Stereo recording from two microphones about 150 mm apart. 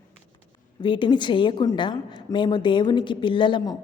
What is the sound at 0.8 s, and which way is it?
A woman's voice, 30° left (ahead or behind).